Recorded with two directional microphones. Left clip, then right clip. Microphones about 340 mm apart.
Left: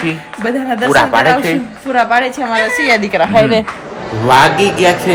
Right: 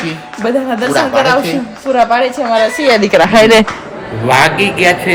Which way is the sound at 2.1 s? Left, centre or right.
Centre.